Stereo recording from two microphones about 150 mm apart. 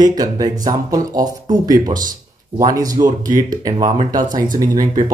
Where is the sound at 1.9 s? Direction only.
65° right (ahead or behind).